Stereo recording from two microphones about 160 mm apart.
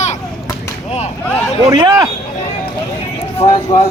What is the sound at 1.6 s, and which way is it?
Speech, 25° right (ahead or behind).